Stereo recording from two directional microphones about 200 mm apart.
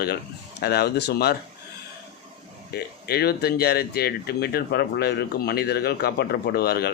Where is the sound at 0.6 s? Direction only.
55° left (ahead or behind).